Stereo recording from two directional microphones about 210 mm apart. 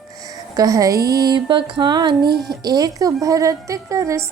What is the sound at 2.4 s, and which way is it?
Speech, 20° right (ahead or behind).